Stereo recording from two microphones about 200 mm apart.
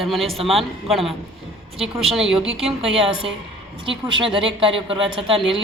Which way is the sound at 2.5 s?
30° right (ahead or behind).